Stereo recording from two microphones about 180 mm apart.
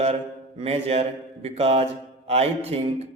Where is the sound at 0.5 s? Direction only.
35° right (ahead or behind).